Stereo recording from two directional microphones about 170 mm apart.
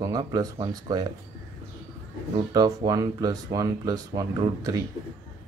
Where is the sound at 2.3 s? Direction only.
20° right (ahead or behind).